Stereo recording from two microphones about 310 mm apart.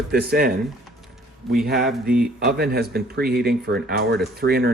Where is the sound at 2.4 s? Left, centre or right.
Right.